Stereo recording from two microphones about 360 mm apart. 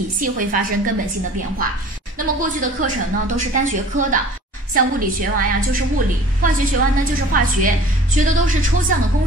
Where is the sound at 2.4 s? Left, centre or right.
Right.